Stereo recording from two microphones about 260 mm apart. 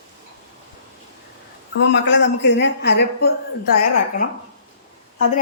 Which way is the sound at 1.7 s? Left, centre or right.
Left.